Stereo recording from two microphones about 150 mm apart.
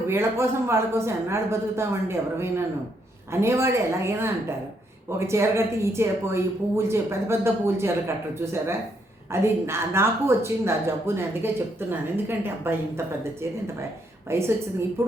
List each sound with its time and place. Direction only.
0.1 s speech: 15° right (ahead or behind)